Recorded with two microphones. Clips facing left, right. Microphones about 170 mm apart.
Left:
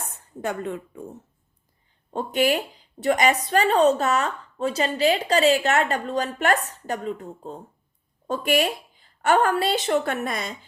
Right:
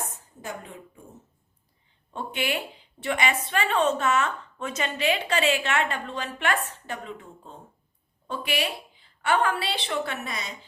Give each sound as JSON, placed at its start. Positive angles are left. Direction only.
{"t": 0.4, "sound": "speech", "side_deg": 70}
{"t": 2.0, "sound": "a woman's voice", "side_deg": 40}